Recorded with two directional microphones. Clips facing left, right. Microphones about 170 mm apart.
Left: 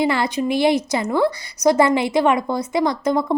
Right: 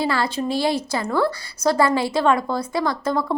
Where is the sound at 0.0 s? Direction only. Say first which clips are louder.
Left 3 dB; 20° left (ahead or behind).